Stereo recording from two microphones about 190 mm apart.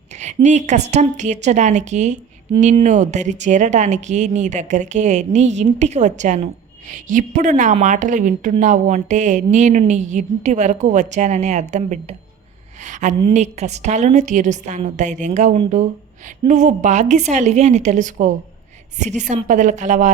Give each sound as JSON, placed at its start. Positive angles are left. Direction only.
{"t": 0.1, "sound": "a sound", "side_deg": -35}
{"t": 0.4, "sound": "a woman's voice", "side_deg": -40}
{"t": 19.3, "sound": "speech", "side_deg": -40}